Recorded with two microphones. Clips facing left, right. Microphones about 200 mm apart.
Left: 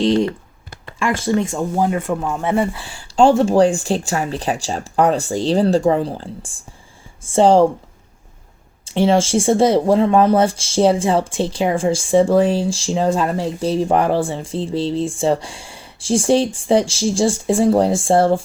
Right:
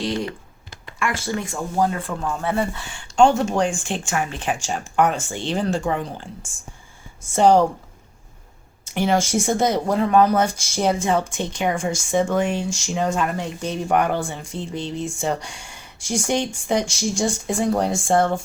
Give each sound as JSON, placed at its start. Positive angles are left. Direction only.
{"t": 0.0, "sound": "speech", "side_deg": 25}
{"t": 7.3, "sound": "speech", "side_deg": 30}
{"t": 8.8, "sound": "speech", "side_deg": 30}